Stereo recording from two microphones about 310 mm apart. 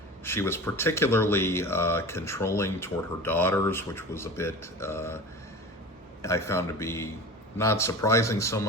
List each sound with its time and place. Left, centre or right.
0.3 s speech: centre
6.2 s speech: centre